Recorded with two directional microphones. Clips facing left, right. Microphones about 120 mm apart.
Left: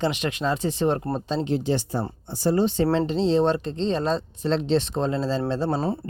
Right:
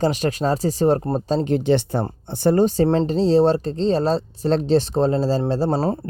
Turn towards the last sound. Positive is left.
turn(degrees=-40)  # may be behind; listen again after turning